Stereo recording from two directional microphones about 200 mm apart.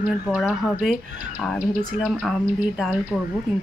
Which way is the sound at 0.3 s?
5° right (ahead or behind).